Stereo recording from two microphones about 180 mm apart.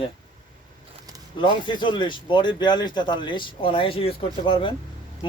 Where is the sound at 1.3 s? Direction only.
25° left (ahead or behind).